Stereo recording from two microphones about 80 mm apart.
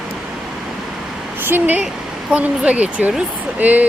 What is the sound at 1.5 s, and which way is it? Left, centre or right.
Speech, right.